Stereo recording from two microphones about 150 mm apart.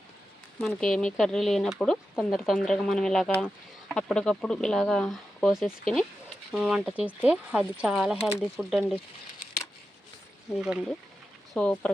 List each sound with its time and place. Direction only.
0.6 s speech: 5° left (ahead or behind)
10.6 s speech: 5° right (ahead or behind)
11.5 s speech: 10° left (ahead or behind)